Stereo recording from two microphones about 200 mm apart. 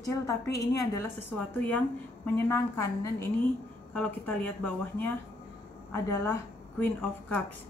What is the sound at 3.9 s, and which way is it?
A woman's voice, 10° left (ahead or behind).